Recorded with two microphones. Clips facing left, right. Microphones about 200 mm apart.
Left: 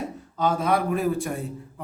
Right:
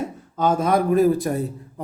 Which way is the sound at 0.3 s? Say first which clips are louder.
Right 4 dB; 45° right (ahead or behind).